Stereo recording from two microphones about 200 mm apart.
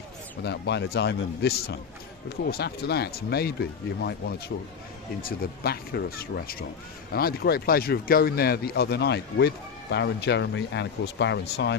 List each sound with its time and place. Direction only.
0.4 s speech: 60° left (ahead or behind)